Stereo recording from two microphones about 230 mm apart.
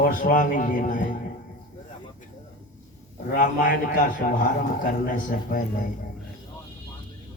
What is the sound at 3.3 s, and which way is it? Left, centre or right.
A man's voice, left.